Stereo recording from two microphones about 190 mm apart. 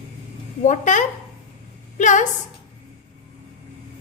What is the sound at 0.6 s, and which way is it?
A woman's voice, 40° left (ahead or behind).